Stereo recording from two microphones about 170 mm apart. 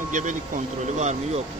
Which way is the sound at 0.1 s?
45° right (ahead or behind).